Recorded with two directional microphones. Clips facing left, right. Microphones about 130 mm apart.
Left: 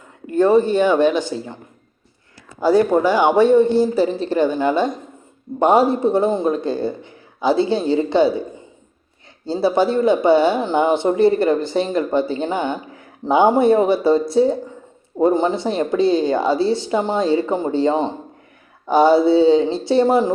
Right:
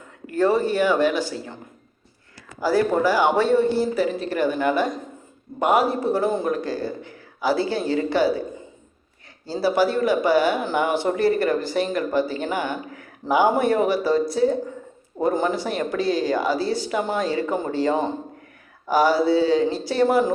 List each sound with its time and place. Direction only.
0.3 s speech: 20° left (ahead or behind)
2.6 s speech: 20° left (ahead or behind)
3.9 s speech: 30° left (ahead or behind)
9.5 s speech: 25° left (ahead or behind)